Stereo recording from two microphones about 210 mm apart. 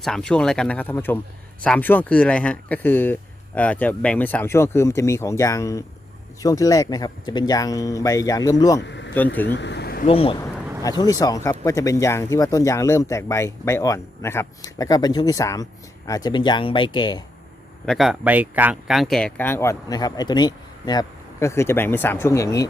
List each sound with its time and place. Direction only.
0.0 s speech: 5° left (ahead or behind)
8.8 s vehicle: 55° left (ahead or behind)
9.1 s speech: 10° left (ahead or behind)
9.6 s a sound: 55° left (ahead or behind)
10.1 s speech: 25° left (ahead or behind)
17.8 s speech: centre (ahead or behind); by 22.7 s 15° left (ahead or behind)